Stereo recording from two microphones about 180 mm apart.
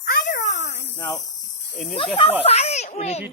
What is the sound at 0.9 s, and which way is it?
Speech, 20° left (ahead or behind).